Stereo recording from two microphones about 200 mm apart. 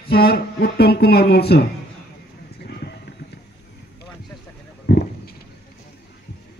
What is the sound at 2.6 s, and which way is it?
Music, 55° left (ahead or behind).